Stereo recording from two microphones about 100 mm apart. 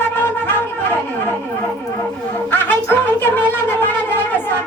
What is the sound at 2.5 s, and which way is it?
Speech, 20° left (ahead or behind).